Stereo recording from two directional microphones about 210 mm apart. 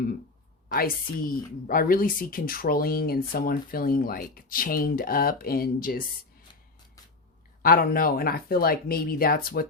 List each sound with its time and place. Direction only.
0.7 s a woman's voice: 40° left (ahead or behind)
7.6 s a woman's voice: 45° left (ahead or behind)